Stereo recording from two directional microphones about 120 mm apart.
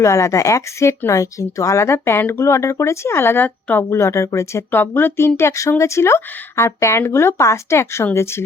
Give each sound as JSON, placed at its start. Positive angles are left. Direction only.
{"t": 0.0, "sound": "speech", "side_deg": 25}